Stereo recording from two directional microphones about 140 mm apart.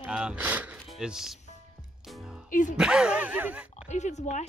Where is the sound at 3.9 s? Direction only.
55° left (ahead or behind).